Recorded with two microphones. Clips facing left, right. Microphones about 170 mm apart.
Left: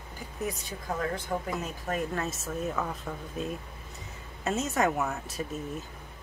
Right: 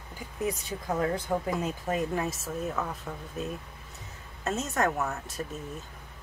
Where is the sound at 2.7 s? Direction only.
Centre (ahead or behind).